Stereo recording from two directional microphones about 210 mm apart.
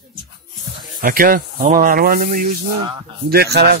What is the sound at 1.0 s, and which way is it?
Speech, 45° right (ahead or behind).